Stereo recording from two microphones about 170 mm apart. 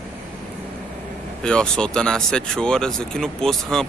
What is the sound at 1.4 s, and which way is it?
Speech, 5° left (ahead or behind).